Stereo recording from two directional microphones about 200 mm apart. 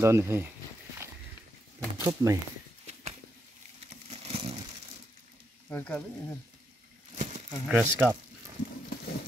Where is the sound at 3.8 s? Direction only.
35° right (ahead or behind).